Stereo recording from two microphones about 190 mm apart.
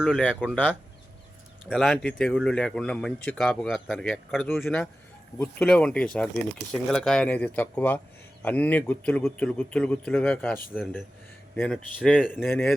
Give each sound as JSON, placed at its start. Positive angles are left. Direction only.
{"t": 0.4, "sound": "speech", "side_deg": 10}
{"t": 1.7, "sound": "speech", "side_deg": 0}
{"t": 11.9, "sound": "speech", "side_deg": -5}
{"t": 12.3, "sound": "speech", "side_deg": 10}